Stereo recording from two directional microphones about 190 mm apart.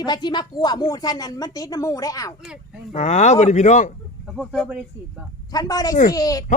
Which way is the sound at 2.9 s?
35° left (ahead or behind).